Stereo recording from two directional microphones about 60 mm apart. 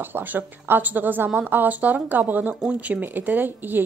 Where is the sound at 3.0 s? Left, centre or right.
Right.